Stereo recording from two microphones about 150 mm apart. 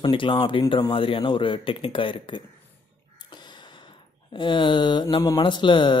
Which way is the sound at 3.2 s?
30° left (ahead or behind).